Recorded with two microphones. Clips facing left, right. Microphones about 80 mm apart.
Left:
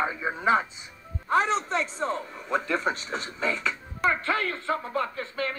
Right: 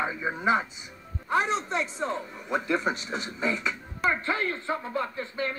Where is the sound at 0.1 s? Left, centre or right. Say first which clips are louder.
Left 1 dB; centre.